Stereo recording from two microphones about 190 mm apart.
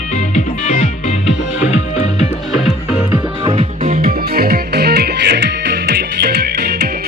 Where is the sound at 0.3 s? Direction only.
35° left (ahead or behind).